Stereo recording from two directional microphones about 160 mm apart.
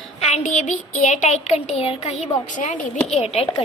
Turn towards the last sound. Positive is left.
turn(degrees=40)  # may be behind; listen again after turning